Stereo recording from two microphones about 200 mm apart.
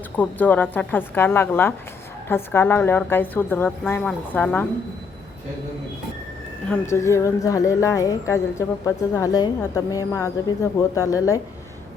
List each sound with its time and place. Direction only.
0.2 s a woman's voice: 10° left (ahead or behind)
6.7 s a woman's voice: 15° left (ahead or behind)